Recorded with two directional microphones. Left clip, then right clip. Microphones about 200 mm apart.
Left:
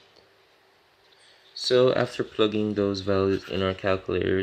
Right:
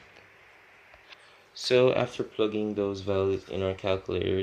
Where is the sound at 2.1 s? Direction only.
35° left (ahead or behind).